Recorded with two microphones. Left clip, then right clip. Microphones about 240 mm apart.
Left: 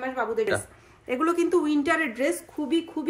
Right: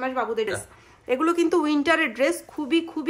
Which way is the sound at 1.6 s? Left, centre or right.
Right.